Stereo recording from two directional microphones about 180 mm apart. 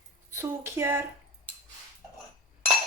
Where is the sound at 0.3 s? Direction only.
15° right (ahead or behind).